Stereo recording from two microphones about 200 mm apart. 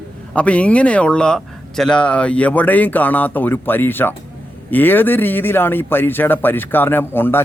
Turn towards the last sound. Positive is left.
turn(degrees=10)  # may be behind; listen again after turning